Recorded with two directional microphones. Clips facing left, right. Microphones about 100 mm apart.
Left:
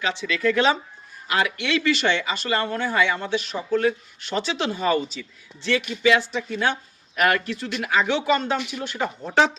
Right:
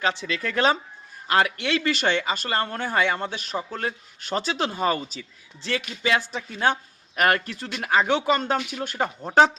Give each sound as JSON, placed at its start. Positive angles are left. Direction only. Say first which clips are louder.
{"t": 0.0, "sound": "speech", "louder": "left 3 dB", "side_deg": -40}